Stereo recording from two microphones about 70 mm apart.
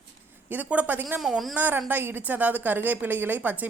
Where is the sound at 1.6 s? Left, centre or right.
Right.